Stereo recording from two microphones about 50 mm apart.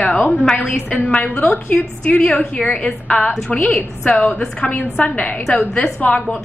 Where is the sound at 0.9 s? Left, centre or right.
Left.